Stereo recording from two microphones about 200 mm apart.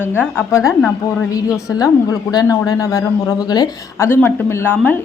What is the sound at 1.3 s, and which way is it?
A woman's voice, 15° left (ahead or behind).